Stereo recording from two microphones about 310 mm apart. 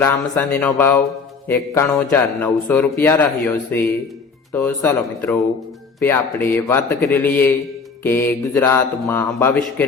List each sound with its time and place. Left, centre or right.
0.0 s a man's voice: centre